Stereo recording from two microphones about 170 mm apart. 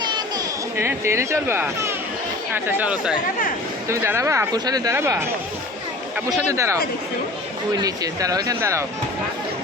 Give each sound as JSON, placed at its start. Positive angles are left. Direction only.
{"t": 0.0, "sound": "a sound", "side_deg": -25}
{"t": 0.8, "sound": "speech", "side_deg": -15}
{"t": 3.8, "sound": "speech", "side_deg": -15}
{"t": 6.5, "sound": "speech", "side_deg": -20}